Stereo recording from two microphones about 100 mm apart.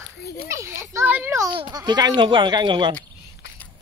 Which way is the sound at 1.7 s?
40° right (ahead or behind).